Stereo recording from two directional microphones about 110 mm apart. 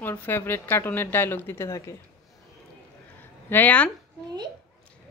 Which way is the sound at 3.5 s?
15° left (ahead or behind).